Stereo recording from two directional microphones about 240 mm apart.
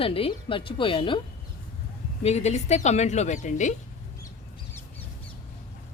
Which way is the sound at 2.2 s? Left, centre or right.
Left.